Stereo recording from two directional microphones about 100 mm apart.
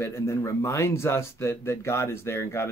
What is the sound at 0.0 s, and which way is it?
Speech, 25° left (ahead or behind).